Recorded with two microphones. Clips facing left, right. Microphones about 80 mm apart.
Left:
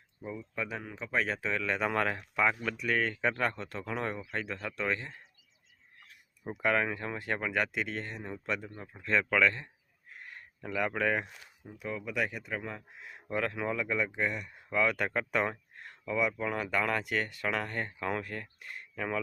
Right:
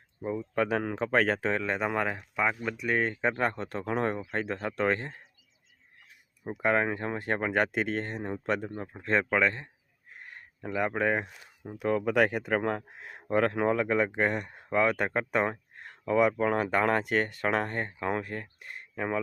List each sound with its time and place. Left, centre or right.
0.2 s speech: right
0.5 s speech: right
1.5 s speech: right
1.8 s speech: centre; by 5.2 s right
6.1 s a sound: centre
6.6 s speech: right
10.2 s a sound: right
11.8 s speech: right
13.0 s speech: right
16.0 s speech: right